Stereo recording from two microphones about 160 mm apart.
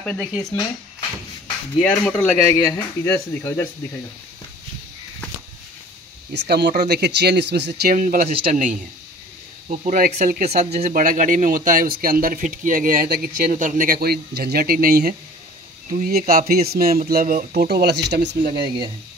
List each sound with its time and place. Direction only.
0.0 s speech: 10° left (ahead or behind)
1.8 s speech: 5° left (ahead or behind)
6.3 s speech: 90° right
8.0 s speech: 55° right (ahead or behind)
10.6 s speech: 45° right (ahead or behind); by 17.0 s 70° right (ahead or behind)
17.1 s speech: 60° right (ahead or behind); by 18.4 s 90° right